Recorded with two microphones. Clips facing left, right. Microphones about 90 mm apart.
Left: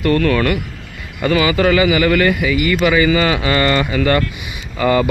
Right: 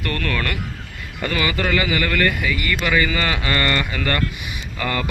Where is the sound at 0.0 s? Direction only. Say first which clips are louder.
Left 10 dB; 15° left (ahead or behind).